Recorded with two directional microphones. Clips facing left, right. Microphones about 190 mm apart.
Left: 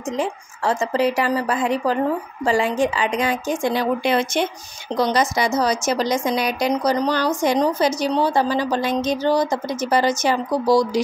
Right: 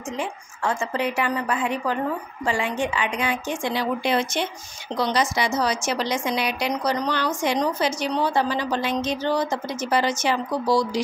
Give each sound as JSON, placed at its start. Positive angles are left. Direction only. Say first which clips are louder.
{"t": 0.2, "sound": "a woman's voice", "louder": "left 3 dB", "side_deg": 35}
{"t": 4.9, "sound": "a woman's voice", "louder": "left 4 dB", "side_deg": 45}